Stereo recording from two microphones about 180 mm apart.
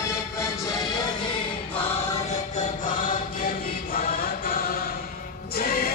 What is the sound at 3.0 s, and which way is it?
Chant, 50° left (ahead or behind).